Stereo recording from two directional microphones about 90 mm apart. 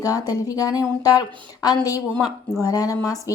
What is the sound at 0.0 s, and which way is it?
A woman's voice, 45° left (ahead or behind).